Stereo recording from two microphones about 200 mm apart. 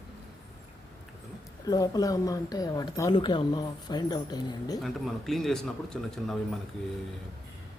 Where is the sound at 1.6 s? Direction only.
20° left (ahead or behind).